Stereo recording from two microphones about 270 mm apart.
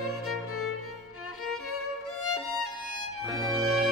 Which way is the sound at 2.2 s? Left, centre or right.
Left.